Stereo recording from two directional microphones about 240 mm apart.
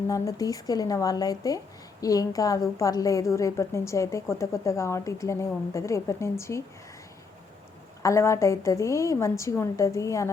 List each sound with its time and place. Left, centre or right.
0.1 s speech: centre
8.0 s speech: centre